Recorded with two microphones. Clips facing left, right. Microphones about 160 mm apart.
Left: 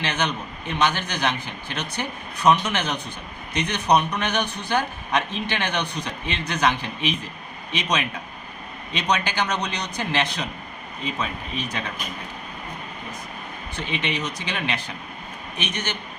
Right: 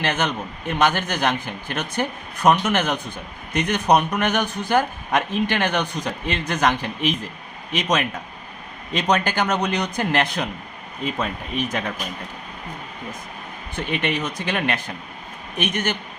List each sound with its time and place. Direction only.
0.0 s speech: 50° right (ahead or behind)
13.7 s speech: 50° right (ahead or behind)